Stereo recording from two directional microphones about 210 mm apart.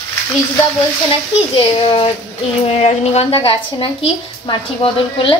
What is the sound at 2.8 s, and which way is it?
A woman's voice, 30° left (ahead or behind).